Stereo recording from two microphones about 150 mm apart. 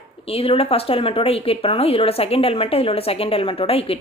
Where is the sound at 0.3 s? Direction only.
40° left (ahead or behind).